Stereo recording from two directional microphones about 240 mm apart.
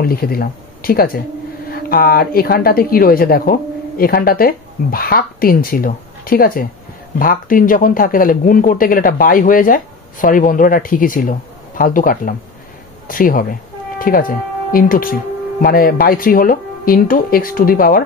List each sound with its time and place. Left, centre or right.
0.0 s speech: left